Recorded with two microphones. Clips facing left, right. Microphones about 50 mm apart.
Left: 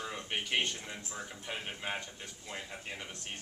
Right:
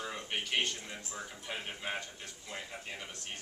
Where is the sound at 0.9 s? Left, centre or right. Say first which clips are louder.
Even; centre.